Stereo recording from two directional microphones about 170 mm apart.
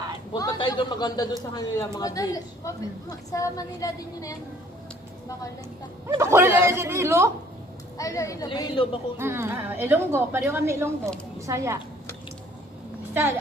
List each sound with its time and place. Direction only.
0.3 s a man's voice: 20° left (ahead or behind)
6.1 s a woman's voice: 15° right (ahead or behind)
7.9 s a woman's voice: 20° left (ahead or behind)
9.1 s a woman's voice: 15° right (ahead or behind)